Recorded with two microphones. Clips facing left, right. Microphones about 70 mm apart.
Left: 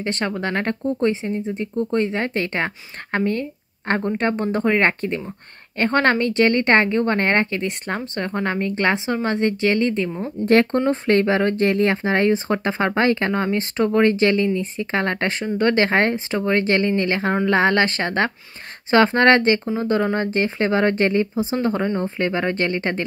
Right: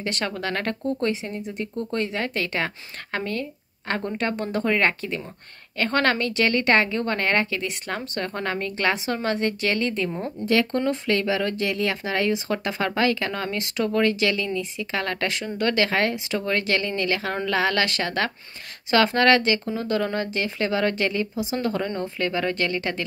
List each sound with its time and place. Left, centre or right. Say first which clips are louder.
0.0 s a woman's voice: left 4 dB; left
10.4 s speech: left 6 dB; left
10.7 s a woman's voice: left 5 dB; left